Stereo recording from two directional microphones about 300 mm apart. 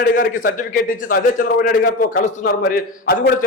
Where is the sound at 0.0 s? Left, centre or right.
Left.